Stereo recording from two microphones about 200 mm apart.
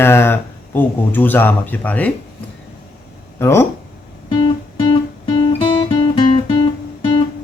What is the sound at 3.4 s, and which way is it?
Speech, 15° left (ahead or behind).